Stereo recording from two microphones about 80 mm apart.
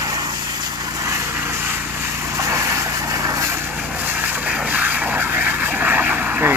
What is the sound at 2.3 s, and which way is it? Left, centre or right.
Vehicle, right.